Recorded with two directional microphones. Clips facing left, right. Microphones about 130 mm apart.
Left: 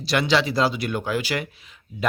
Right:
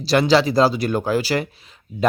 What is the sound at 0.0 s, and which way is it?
Speech, 35° right (ahead or behind).